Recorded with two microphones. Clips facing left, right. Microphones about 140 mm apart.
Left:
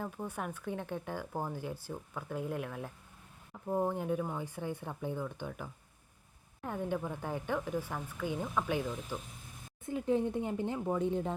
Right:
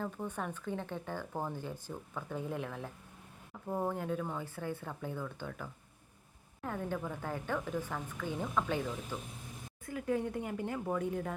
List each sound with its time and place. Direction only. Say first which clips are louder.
0.0 s speech: even; 10° left (ahead or behind)
3.7 s speech: left 3 dB; 15° left (ahead or behind)
9.8 s speech: left 3 dB; 25° left (ahead or behind)